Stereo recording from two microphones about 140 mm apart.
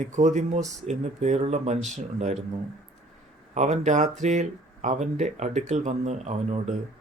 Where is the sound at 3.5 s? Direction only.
60° right (ahead or behind).